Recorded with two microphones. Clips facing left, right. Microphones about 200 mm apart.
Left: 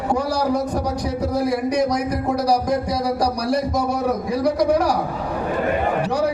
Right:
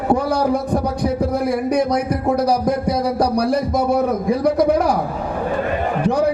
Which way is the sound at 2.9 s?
55° right (ahead or behind).